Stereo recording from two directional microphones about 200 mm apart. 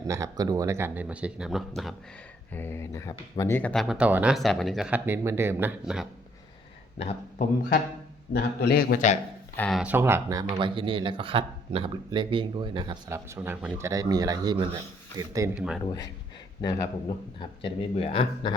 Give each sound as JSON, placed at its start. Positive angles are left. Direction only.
{"t": 0.1, "sound": "speech", "side_deg": -15}
{"t": 2.5, "sound": "speech", "side_deg": 10}
{"t": 7.0, "sound": "speech", "side_deg": 30}
{"t": 8.3, "sound": "a man's voice", "side_deg": 55}
{"t": 9.6, "sound": "speech", "side_deg": 0}
{"t": 15.5, "sound": "speech", "side_deg": -5}
{"t": 16.6, "sound": "speech", "side_deg": 20}